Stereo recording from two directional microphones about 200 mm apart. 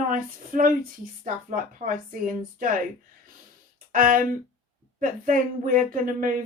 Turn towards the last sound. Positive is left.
turn(degrees=-45)  # may be behind; listen again after turning